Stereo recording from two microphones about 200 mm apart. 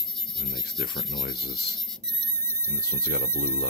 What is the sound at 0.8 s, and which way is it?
Speech, 55° left (ahead or behind).